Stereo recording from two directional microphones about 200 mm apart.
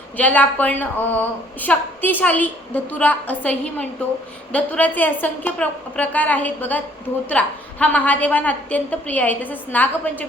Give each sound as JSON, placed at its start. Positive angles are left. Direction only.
{"t": 0.2, "sound": "a woman's voice", "side_deg": 10}